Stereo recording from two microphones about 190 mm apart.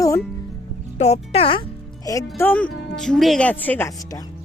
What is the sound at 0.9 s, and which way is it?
A child's voice, 35° left (ahead or behind).